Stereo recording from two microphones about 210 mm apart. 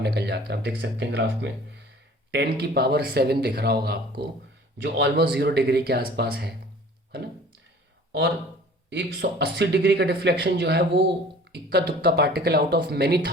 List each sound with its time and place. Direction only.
0.0 s speech: 50° right (ahead or behind)
8.9 s speech: 55° right (ahead or behind)